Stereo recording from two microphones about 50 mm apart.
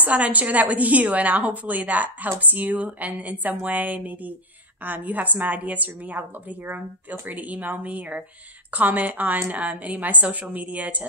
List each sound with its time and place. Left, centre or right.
0.0 s a woman's voice: right